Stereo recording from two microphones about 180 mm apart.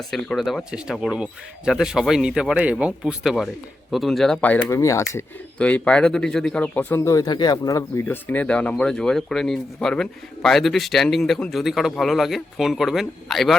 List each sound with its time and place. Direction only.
0.1 s speech: centre (ahead or behind)